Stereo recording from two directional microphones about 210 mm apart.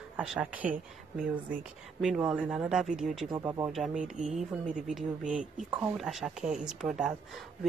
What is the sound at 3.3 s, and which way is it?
Speech, 15° right (ahead or behind).